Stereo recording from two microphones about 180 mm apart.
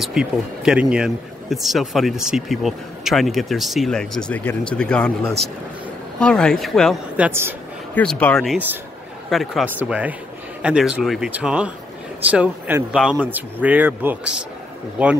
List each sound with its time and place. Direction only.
0.0 s speech: 5° right (ahead or behind)
7.2 s speech: 15° right (ahead or behind)
7.9 s speech: 5° left (ahead or behind)